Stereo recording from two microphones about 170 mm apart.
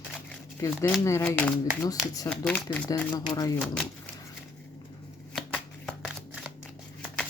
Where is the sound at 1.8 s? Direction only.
20° left (ahead or behind).